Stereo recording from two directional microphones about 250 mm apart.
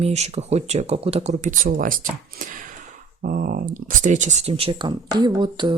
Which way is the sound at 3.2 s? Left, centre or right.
Right.